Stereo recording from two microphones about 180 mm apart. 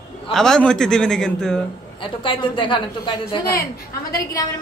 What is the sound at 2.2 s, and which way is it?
A woman's voice, 25° left (ahead or behind).